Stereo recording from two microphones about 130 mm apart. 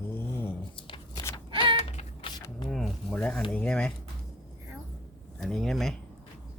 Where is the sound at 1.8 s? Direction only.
55° left (ahead or behind).